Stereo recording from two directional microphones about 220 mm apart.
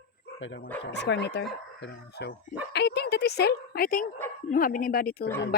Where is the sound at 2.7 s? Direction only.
50° left (ahead or behind).